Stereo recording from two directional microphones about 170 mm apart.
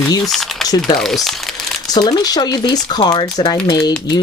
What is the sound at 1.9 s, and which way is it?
Speech, 25° left (ahead or behind).